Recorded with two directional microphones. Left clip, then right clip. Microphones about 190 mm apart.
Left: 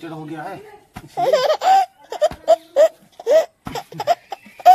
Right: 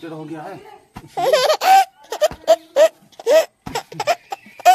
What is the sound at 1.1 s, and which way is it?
Laughter, 45° right (ahead or behind).